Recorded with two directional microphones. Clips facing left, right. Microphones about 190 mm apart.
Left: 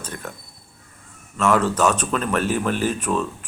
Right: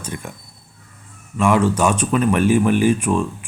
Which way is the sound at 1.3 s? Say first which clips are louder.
Right 3 dB; 10° right (ahead or behind).